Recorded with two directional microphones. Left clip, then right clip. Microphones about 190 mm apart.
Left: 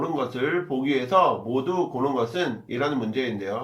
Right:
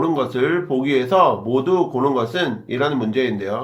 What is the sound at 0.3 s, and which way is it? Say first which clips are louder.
Speech: right 6 dB; 45° right (ahead or behind).